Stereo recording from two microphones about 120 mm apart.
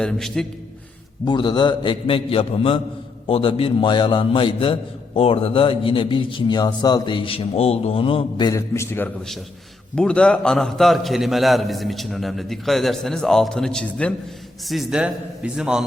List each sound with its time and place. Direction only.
0.0 s a man's voice: 5° left (ahead or behind)
1.2 s a man's voice: 35° left (ahead or behind)
8.4 s a man's voice: 25° left (ahead or behind)
9.9 s a man's voice: 10° left (ahead or behind)